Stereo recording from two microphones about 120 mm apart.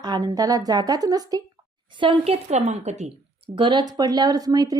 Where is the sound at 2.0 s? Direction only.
50° right (ahead or behind); by 3.1 s 70° right (ahead or behind).